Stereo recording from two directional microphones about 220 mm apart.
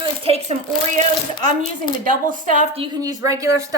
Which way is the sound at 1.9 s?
35° right (ahead or behind).